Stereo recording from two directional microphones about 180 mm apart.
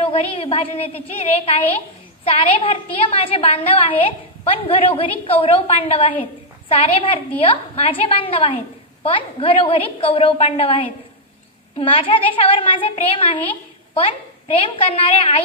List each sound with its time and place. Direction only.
0.0 s a woman's voice: 30° left (ahead or behind)